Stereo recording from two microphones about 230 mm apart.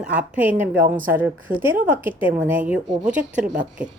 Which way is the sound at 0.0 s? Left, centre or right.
Centre.